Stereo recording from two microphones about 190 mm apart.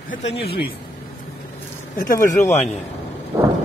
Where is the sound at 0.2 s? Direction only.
30° left (ahead or behind).